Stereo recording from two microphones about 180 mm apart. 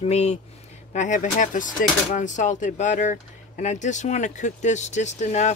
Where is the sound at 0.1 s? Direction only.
35° left (ahead or behind).